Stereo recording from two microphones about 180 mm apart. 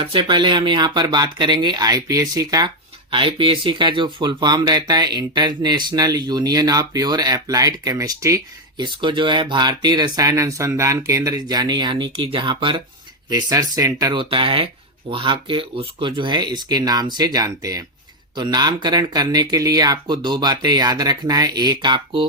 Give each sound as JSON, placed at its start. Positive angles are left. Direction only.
{"t": 0.0, "sound": "speech", "side_deg": -25}